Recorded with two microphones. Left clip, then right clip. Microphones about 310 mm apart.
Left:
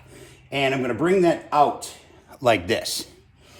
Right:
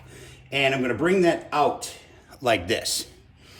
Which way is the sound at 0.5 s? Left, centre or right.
Centre.